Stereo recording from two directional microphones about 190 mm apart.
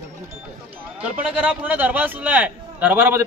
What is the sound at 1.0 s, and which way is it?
A man's voice, 5° right (ahead or behind).